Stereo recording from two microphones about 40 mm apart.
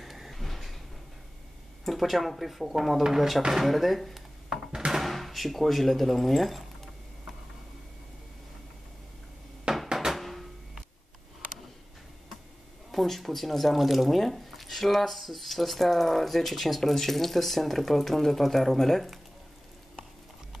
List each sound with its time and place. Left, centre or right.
0.0 s a sound: centre
1.9 s speech: centre
4.7 s thunk: centre
5.0 s speech: centre
9.7 s dishes: right
10.1 s a sound: centre
12.9 s speech: centre